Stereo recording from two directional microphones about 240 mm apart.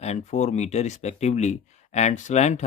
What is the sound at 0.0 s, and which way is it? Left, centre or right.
Speech, left.